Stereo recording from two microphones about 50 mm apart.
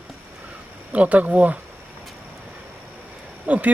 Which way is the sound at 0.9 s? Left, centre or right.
Right.